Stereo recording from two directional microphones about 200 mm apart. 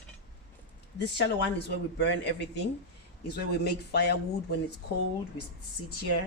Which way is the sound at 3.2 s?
55° left (ahead or behind).